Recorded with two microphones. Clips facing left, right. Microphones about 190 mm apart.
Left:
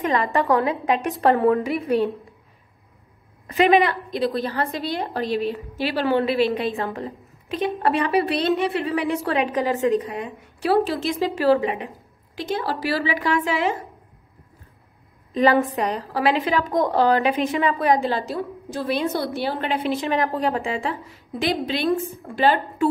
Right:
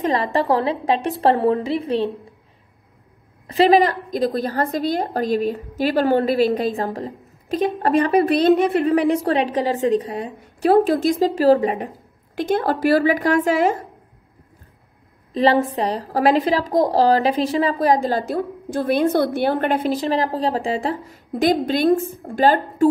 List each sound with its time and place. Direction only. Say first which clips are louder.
0.0 s a woman's voice: right 2 dB; 35° right (ahead or behind)
3.4 s a woman's voice: right 3 dB; 35° right (ahead or behind)
12.4 s a woman's voice: right 6 dB; 55° right (ahead or behind)
15.3 s a woman's voice: right 1 dB; 35° right (ahead or behind)